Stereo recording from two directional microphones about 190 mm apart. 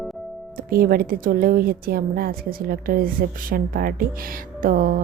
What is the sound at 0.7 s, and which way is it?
A woman's voice, 50° right (ahead or behind).